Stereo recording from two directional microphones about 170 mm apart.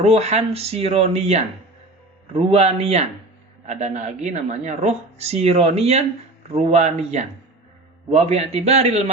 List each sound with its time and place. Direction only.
0.0 s speech: 40° right (ahead or behind)